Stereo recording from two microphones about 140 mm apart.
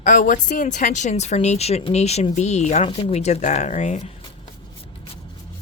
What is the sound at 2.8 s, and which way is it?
A woman's voice, 45° left (ahead or behind).